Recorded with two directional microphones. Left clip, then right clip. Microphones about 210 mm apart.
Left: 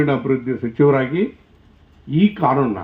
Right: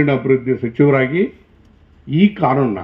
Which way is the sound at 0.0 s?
50° right (ahead or behind).